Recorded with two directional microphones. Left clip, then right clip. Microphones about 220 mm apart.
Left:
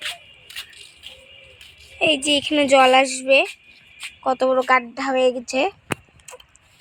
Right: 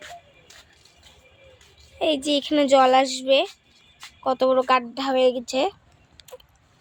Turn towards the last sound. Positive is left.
turn(degrees=5)  # may be behind; listen again after turning